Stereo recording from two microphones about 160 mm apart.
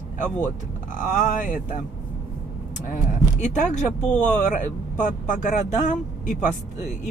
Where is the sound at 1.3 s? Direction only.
55° left (ahead or behind).